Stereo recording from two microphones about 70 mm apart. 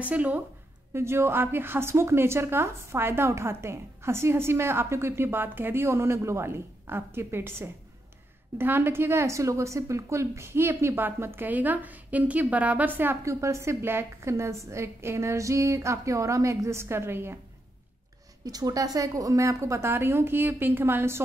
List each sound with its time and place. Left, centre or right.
0.0 s a woman's voice: right
0.9 s a woman's voice: right
13.2 s a woman's voice: right
18.4 s a woman's voice: right